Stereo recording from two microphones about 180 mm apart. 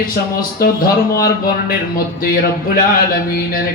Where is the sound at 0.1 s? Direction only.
55° left (ahead or behind).